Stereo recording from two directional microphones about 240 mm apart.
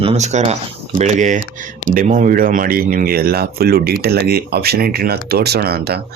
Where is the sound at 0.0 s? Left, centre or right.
Right.